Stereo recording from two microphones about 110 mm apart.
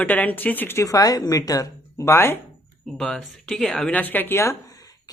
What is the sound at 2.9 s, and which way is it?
Speech, 5° left (ahead or behind).